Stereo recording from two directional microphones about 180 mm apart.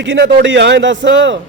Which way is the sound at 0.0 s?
90° right.